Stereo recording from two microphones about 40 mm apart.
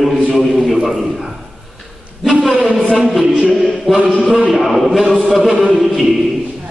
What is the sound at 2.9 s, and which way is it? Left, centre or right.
Speech, centre.